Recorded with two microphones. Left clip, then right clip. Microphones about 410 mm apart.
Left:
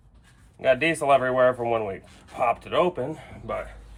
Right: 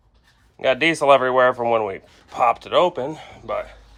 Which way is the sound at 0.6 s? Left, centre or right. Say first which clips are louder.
Right 3 dB; centre.